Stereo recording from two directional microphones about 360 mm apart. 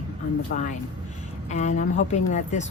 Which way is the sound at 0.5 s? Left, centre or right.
Left.